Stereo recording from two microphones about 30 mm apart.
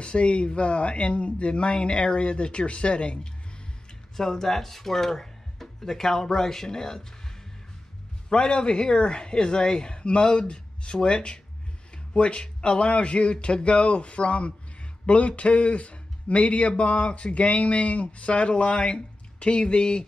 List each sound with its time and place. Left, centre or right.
0.0 s speech: left
4.2 s speech: centre
8.3 s speech: left